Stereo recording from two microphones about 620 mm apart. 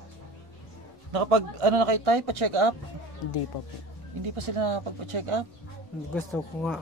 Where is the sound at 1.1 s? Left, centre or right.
Right.